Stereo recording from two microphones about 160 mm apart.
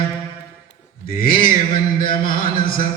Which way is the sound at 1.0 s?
65° left (ahead or behind).